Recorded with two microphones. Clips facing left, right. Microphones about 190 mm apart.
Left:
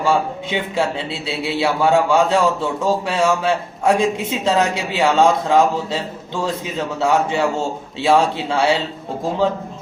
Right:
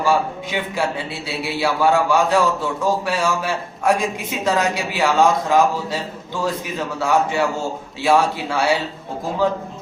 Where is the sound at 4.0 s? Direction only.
25° left (ahead or behind).